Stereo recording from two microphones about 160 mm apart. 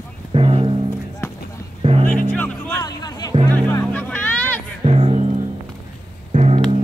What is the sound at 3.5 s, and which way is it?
Music, 10° left (ahead or behind).